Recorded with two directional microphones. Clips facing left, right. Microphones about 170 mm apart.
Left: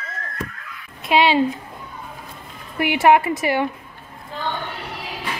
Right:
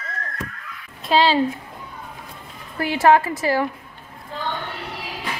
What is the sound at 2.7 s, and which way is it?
Speech, 20° left (ahead or behind).